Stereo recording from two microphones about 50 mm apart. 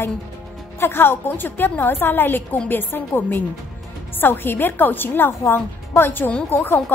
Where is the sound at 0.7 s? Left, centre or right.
Left.